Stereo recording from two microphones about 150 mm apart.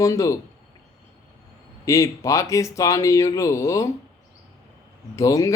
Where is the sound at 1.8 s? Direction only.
20° left (ahead or behind).